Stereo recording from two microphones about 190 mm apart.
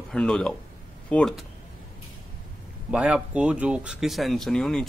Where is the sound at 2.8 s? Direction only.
5° right (ahead or behind).